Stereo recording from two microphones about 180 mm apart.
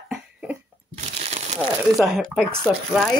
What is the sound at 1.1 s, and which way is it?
Crumpling, 35° right (ahead or behind).